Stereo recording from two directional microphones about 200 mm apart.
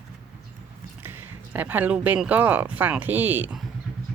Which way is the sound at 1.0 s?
10° right (ahead or behind).